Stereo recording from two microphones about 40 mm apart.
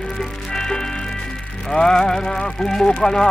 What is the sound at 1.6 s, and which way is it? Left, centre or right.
Speech, centre.